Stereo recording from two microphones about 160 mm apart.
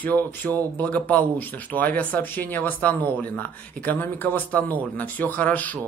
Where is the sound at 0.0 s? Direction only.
10° left (ahead or behind).